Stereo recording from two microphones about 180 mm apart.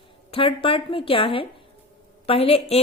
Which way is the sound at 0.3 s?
30° left (ahead or behind).